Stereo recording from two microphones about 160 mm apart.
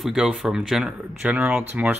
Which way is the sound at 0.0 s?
5° right (ahead or behind).